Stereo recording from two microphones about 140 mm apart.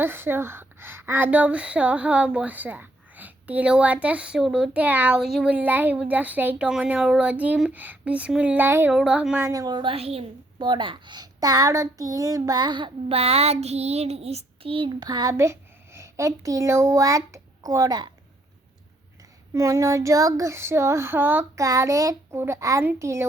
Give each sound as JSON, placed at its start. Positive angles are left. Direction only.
{"t": 0.0, "sound": "a woman's voice", "side_deg": -15}
{"t": 9.5, "sound": "a woman's voice", "side_deg": -25}
{"t": 10.6, "sound": "a child's voice", "side_deg": -35}
{"t": 19.5, "sound": "a child's voice", "side_deg": -20}